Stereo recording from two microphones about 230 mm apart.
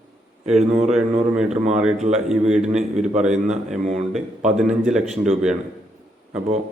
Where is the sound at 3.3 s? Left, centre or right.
Right.